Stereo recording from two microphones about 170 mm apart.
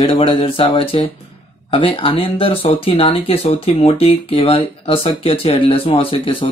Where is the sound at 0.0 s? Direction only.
30° left (ahead or behind).